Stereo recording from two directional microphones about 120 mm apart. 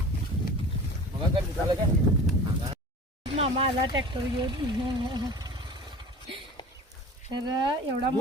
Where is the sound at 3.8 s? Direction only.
45° right (ahead or behind).